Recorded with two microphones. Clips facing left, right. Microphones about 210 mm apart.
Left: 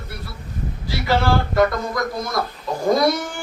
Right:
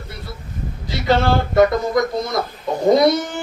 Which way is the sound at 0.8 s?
20° right (ahead or behind).